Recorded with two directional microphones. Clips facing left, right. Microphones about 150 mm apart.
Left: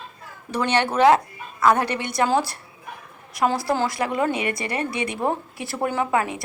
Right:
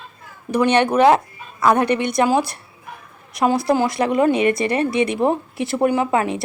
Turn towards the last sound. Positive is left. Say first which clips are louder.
# right 4 dB
turn(degrees=-20)  # may be behind; listen again after turning